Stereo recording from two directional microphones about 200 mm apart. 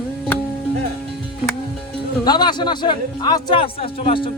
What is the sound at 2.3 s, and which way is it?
A man's voice, 20° left (ahead or behind).